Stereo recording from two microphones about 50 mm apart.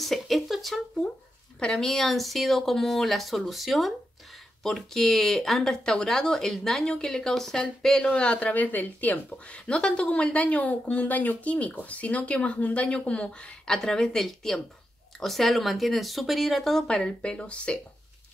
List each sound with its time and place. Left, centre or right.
0.0 s a sound: centre
1.6 s speech: centre
8.2 s speech: left
9.5 s speech: left; by 16.8 s centre
16.8 s speech: centre